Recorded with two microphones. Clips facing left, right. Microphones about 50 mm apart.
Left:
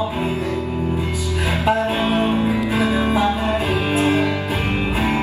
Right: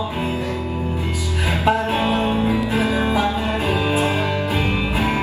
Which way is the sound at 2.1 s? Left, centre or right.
Left.